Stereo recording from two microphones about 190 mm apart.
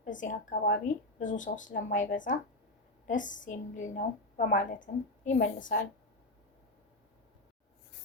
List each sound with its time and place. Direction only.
0.0 s a woman's voice: 45° left (ahead or behind)